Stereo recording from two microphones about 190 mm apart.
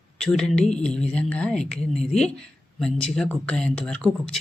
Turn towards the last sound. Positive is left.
turn(degrees=5)  # may be behind; listen again after turning